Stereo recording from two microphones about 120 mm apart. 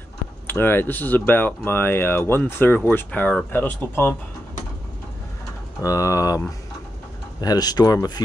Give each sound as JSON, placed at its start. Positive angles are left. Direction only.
{"t": 0.5, "sound": "speech", "side_deg": 15}
{"t": 5.8, "sound": "speech", "side_deg": 25}